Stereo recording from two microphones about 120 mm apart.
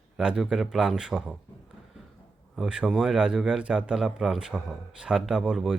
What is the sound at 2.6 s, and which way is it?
A man's voice, 5° right (ahead or behind).